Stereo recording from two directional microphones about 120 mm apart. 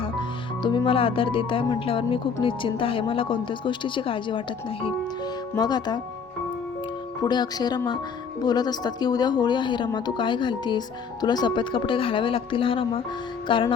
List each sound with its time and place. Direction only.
0.0 s speech: 40° left (ahead or behind)
5.5 s speech: 35° left (ahead or behind)
7.2 s speech: 35° left (ahead or behind)